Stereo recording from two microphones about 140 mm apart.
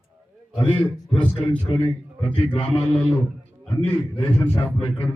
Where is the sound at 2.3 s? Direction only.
40° left (ahead or behind).